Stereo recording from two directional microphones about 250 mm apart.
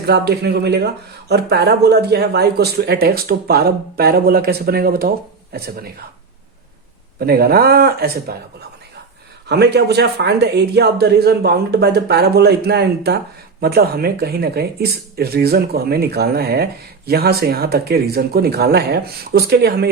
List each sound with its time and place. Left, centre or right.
0.0 s speech: right
7.2 s speech: right
9.5 s speech: right